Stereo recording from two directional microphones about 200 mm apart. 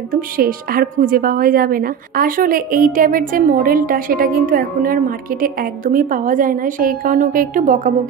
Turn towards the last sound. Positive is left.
turn(degrees=-40)  # may be behind; listen again after turning